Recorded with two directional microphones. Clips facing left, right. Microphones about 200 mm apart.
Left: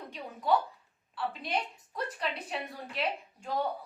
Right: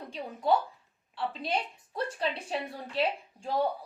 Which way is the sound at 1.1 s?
30° right (ahead or behind).